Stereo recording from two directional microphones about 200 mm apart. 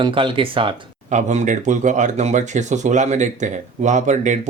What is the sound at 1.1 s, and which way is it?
Speech, 35° right (ahead or behind).